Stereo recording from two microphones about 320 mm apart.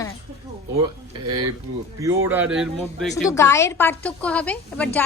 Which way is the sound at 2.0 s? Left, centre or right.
Centre.